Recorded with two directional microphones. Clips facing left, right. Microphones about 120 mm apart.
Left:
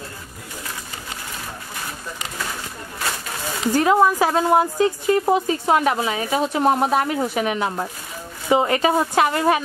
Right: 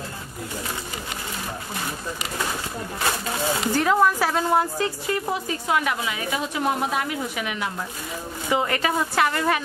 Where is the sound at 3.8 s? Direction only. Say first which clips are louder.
Left 4 dB; 15° left (ahead or behind); by 7.8 s 40° left (ahead or behind).